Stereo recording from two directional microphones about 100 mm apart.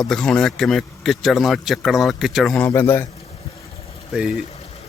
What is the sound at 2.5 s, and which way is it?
Speech, 20° left (ahead or behind).